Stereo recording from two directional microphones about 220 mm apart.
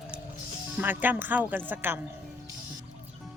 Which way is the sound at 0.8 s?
10° right (ahead or behind).